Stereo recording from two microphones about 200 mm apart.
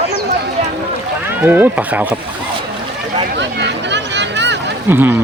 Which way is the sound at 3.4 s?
60° right (ahead or behind).